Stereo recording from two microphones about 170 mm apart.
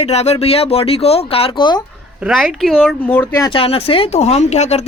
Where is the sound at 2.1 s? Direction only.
5° right (ahead or behind).